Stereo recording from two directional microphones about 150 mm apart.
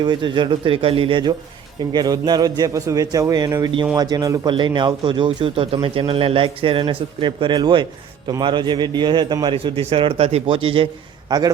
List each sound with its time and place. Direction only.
0.0 s a man's voice: 30° right (ahead or behind)
11.3 s a man's voice: 25° right (ahead or behind)